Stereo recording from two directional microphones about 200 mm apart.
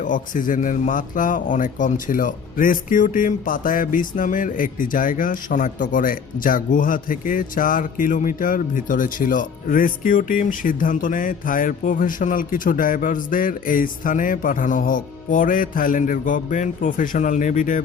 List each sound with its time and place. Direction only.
0.0 s speech: 40° left (ahead or behind)